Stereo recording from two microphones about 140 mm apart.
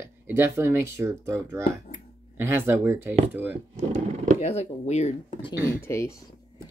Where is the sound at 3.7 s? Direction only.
60° right (ahead or behind).